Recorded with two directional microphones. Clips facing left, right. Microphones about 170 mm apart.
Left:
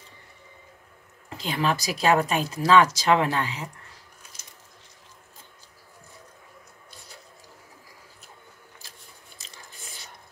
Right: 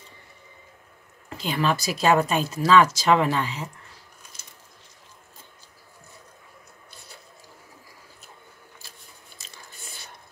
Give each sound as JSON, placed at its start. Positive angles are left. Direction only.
{"t": 1.4, "sound": "speech", "side_deg": 15}
{"t": 9.4, "sound": "biting", "side_deg": 15}